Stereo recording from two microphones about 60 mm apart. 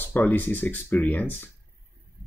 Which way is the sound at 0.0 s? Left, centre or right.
Left.